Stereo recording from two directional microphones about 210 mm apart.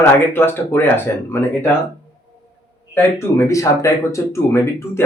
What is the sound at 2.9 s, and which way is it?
Speech, 10° left (ahead or behind).